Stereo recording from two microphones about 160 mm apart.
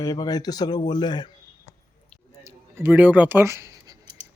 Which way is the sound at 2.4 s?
15° right (ahead or behind).